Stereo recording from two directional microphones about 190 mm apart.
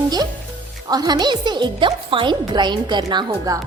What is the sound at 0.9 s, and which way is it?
A woman's voice, 20° right (ahead or behind).